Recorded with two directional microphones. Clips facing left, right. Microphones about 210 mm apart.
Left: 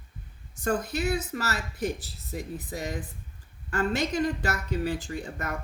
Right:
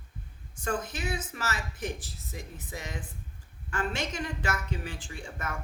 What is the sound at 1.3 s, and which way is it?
Speech, 40° left (ahead or behind).